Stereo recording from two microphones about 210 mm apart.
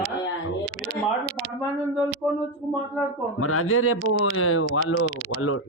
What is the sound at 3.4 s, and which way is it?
Speech, 90° left.